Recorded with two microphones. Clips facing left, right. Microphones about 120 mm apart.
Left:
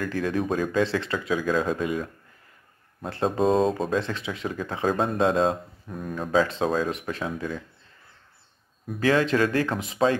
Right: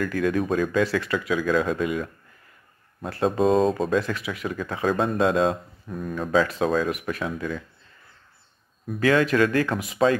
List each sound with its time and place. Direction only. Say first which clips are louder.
0.0 s speech: right 3 dB; 30° left (ahead or behind)
3.5 s speech: right 2 dB; centre (ahead or behind)
3.9 s speech: right 2 dB; 25° left (ahead or behind)
9.0 s speech: right 2 dB; 25° left (ahead or behind)